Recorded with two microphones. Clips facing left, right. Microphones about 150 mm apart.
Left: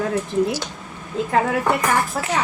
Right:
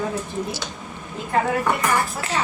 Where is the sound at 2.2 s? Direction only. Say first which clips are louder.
Left 5 dB; 65° left (ahead or behind).